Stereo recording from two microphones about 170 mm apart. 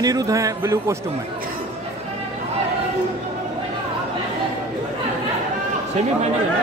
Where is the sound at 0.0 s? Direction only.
20° right (ahead or behind).